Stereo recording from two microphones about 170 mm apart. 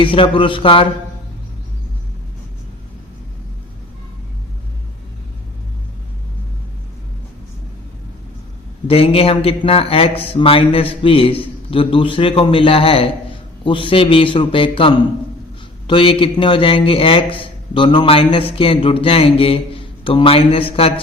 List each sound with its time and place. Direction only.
0.0 s a man's voice: 30° left (ahead or behind)
8.9 s a man's voice: 35° left (ahead or behind)